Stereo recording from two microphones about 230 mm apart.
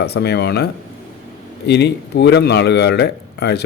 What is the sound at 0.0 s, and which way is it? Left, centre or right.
A man's voice, left.